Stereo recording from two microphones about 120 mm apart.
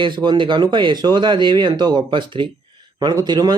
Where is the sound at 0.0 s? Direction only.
40° right (ahead or behind).